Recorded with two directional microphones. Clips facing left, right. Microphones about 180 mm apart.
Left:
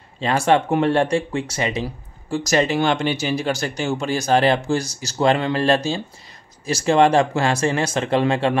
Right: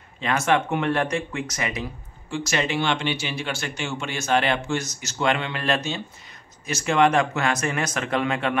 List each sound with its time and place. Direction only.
0.2 s speech: 30° left (ahead or behind)